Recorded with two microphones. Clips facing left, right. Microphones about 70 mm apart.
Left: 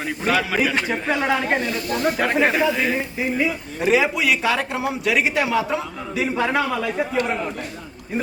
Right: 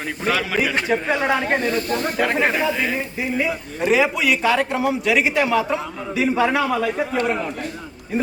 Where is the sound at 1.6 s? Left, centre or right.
Right.